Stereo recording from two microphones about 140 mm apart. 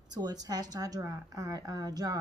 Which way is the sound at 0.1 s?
30° right (ahead or behind).